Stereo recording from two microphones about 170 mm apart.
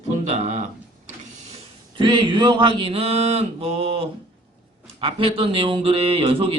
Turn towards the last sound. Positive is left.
turn(degrees=-35)  # may be behind; listen again after turning